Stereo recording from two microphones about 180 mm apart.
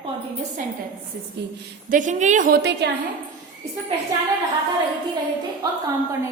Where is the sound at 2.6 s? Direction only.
70° right (ahead or behind).